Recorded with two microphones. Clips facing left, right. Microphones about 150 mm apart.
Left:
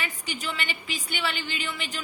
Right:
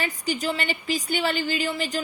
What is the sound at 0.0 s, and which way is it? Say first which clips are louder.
A woman's voice: right 7 dB; 40° right (ahead or behind).